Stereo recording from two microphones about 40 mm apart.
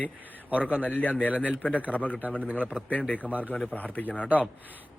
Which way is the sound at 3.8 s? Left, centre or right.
Left.